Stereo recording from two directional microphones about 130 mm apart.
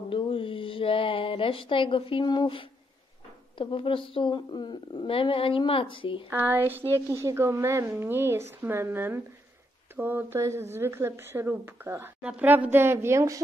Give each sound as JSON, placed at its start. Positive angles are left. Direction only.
{"t": 0.1, "sound": "a sound", "side_deg": 45}
{"t": 3.5, "sound": "a woman's voice", "side_deg": 40}
{"t": 6.3, "sound": "speech", "side_deg": -15}